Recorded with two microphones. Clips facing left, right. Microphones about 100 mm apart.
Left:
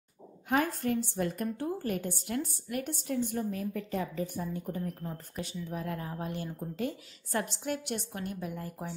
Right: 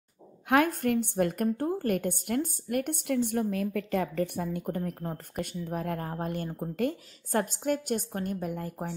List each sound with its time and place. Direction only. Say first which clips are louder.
0.5 s a woman's voice: right 5 dB; 60° right (ahead or behind)
5.0 s speech: right 4 dB; 55° right (ahead or behind)